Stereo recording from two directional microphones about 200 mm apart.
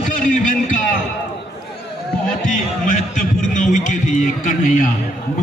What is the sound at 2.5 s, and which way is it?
A man's voice, 40° left (ahead or behind).